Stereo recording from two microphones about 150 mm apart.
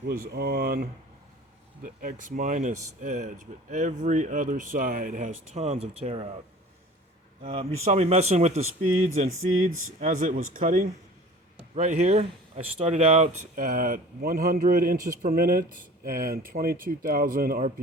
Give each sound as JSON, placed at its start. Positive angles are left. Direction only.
{"t": 0.1, "sound": "speech", "side_deg": -90}
{"t": 1.8, "sound": "speech", "side_deg": -65}
{"t": 7.4, "sound": "speech", "side_deg": -40}
{"t": 11.7, "sound": "speech", "side_deg": -50}